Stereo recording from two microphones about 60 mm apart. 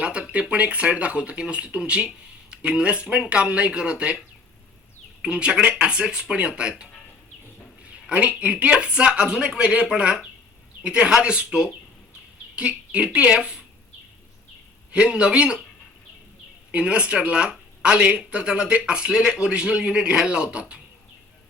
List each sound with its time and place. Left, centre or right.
0.0 s speech: centre
5.2 s speech: centre
8.0 s speech: right
14.9 s speech: centre
16.7 s speech: centre